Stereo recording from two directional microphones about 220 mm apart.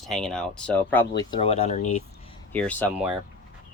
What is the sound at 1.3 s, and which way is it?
Speech, 25° left (ahead or behind).